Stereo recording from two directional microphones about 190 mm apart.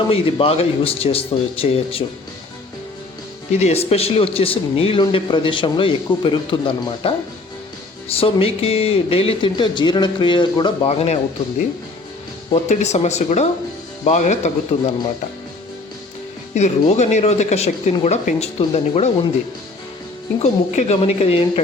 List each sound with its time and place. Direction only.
0.1 s speech: 30° left (ahead or behind)
3.5 s speech: 35° left (ahead or behind)
8.1 s speech: 30° left (ahead or behind)
12.5 s speech: 35° left (ahead or behind)
16.6 s speech: 35° left (ahead or behind)
20.4 s speech: 35° left (ahead or behind)